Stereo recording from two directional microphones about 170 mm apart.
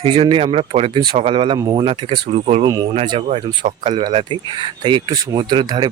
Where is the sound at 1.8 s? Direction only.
30° right (ahead or behind).